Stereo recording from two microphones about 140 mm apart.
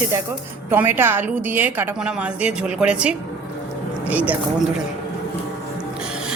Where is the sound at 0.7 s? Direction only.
15° right (ahead or behind).